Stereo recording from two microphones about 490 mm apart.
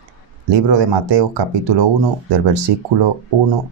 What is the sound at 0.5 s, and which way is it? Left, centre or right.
Speech, right.